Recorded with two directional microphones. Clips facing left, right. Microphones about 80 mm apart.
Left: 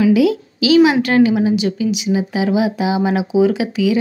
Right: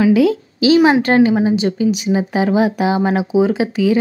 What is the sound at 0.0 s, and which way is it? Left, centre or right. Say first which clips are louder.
A woman's voice: right 1 dB; right.